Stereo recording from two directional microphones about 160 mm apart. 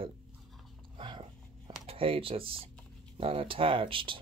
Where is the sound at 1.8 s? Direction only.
35° right (ahead or behind).